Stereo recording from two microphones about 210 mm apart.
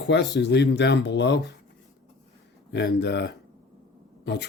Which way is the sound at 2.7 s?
55° left (ahead or behind).